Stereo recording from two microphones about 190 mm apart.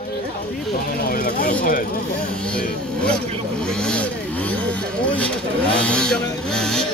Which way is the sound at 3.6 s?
5° left (ahead or behind).